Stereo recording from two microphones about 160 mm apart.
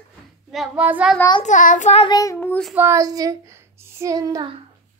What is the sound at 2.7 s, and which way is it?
Child singing, 15° right (ahead or behind).